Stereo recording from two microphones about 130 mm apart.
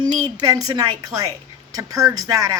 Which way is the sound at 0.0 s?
35° right (ahead or behind).